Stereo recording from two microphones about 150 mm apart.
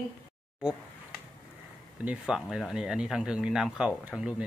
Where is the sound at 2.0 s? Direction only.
5° right (ahead or behind).